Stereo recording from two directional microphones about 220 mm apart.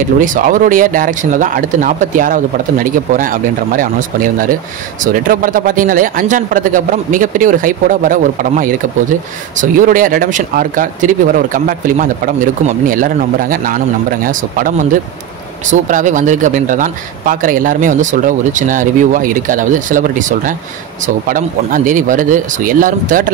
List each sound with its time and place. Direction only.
0.2 s speech: 35° right (ahead or behind)